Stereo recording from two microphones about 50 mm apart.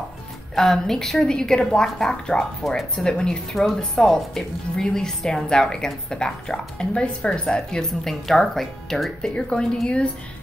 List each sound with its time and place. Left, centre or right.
0.6 s a woman's voice: centre
3.1 s a woman's voice: centre
3.5 s a woman's voice: centre